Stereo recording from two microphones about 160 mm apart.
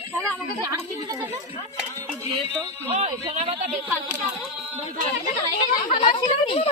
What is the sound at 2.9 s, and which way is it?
Speech, 40° right (ahead or behind).